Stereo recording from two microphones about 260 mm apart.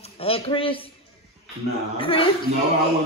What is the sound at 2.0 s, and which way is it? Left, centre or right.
Speech, left.